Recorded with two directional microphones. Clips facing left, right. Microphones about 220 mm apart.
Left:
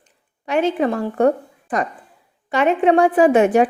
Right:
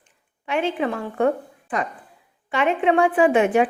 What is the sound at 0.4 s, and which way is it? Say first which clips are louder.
A woman's voice: left 5 dB; 40° left (ahead or behind).